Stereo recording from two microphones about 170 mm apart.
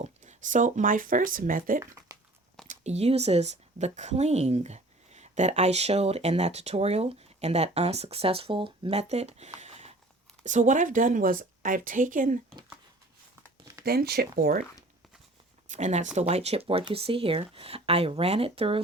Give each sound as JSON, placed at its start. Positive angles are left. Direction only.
{"t": 0.0, "sound": "speech", "side_deg": -45}
{"t": 1.8, "sound": "speech", "side_deg": -15}
{"t": 2.6, "sound": "a woman's voice", "side_deg": -40}
{"t": 9.6, "sound": "a sound", "side_deg": -40}
{"t": 10.4, "sound": "a woman's voice", "side_deg": -45}
{"t": 13.8, "sound": "speech", "side_deg": -65}
{"t": 15.7, "sound": "a woman's voice", "side_deg": -45}